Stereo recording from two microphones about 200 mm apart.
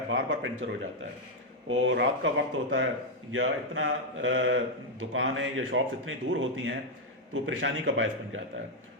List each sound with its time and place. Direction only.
0.1 s a man's voice: 65° right (ahead or behind)
3.3 s a man's voice: 75° right (ahead or behind)